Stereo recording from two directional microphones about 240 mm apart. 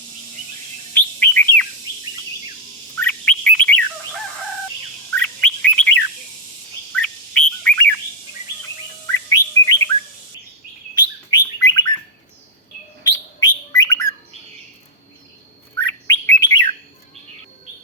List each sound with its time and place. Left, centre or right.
0.9 s chirp: centre
3.0 s bird: centre
5.1 s bird: centre
9.3 s bird: centre
10.9 s chirp: centre
13.4 s bird: centre
15.7 s bird: centre